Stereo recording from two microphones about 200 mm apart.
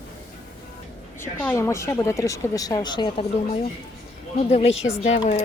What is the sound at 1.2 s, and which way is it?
Speech, 10° left (ahead or behind).